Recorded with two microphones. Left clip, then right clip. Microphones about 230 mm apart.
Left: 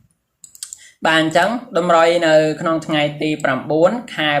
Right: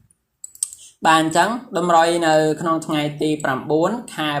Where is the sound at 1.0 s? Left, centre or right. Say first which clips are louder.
Left 1 dB; centre.